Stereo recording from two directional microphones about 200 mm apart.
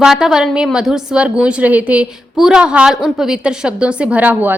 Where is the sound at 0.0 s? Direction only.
Centre (ahead or behind).